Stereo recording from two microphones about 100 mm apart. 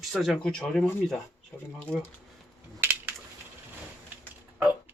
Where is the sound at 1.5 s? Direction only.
25° left (ahead or behind).